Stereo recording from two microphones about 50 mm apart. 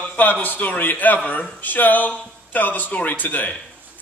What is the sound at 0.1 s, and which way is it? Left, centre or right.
A man's voice, left.